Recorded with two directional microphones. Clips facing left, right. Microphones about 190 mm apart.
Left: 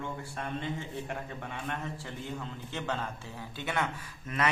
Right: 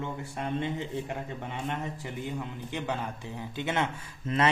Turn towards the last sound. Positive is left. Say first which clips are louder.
# right 6 dB
turn(degrees=-25)  # may be behind; listen again after turning